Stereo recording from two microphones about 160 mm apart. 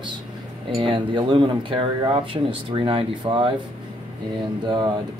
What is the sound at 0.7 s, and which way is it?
Speech, 30° right (ahead or behind).